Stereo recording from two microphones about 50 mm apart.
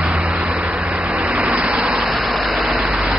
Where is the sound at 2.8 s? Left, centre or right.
Centre.